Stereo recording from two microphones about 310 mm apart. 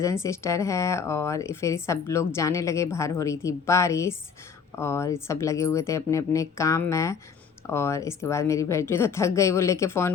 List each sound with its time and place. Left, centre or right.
0.0 s a woman's voice: centre